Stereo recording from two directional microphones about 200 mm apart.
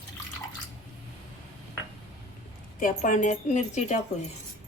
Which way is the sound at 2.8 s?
40° left (ahead or behind).